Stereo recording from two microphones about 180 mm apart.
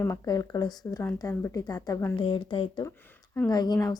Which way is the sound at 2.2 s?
30° left (ahead or behind).